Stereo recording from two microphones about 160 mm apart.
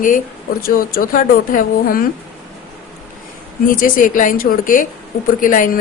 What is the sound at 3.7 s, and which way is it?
A woman's voice, 60° left (ahead or behind).